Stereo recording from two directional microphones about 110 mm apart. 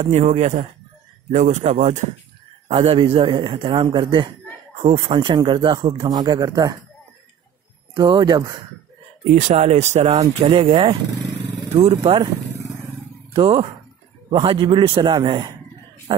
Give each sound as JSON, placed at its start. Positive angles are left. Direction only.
{"t": 0.0, "sound": "speech", "side_deg": -80}
{"t": 2.7, "sound": "a man's voice", "side_deg": -60}
{"t": 4.7, "sound": "a man's voice", "side_deg": -60}
{"t": 7.9, "sound": "speech", "side_deg": -40}
{"t": 9.3, "sound": "speech", "side_deg": -90}
{"t": 10.4, "sound": "speech", "side_deg": -60}
{"t": 13.3, "sound": "a man's voice", "side_deg": -60}
{"t": 16.1, "sound": "speech", "side_deg": -50}